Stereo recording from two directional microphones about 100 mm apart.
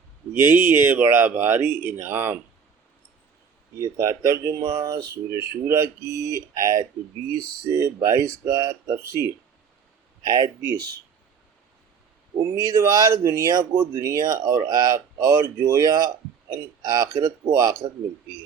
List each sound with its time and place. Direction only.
0.3 s speech: 20° right (ahead or behind)
3.8 s speech: 30° right (ahead or behind)
5.4 s speech: 25° right (ahead or behind)
10.2 s speech: 45° right (ahead or behind)
12.4 s speech: 30° right (ahead or behind)